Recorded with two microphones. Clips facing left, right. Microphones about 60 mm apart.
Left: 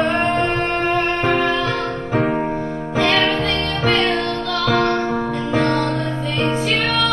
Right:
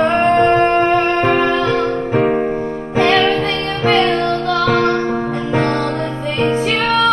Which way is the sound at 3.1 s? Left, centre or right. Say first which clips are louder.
Right 4 dB; right.